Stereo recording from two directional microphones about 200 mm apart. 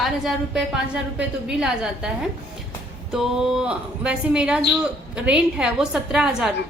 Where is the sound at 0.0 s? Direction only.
Centre (ahead or behind).